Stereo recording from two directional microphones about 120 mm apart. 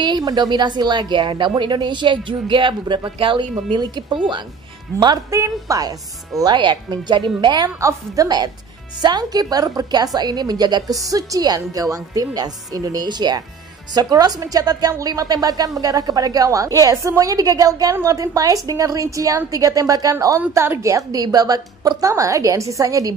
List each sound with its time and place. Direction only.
0.0 s a woman's voice: 35° right (ahead or behind)
4.9 s a woman's voice: 30° right (ahead or behind)